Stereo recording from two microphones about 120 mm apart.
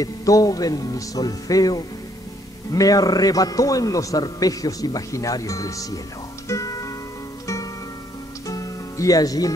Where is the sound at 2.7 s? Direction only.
30° left (ahead or behind).